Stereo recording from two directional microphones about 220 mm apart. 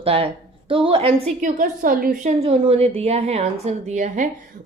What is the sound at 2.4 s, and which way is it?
A woman's voice, 25° right (ahead or behind).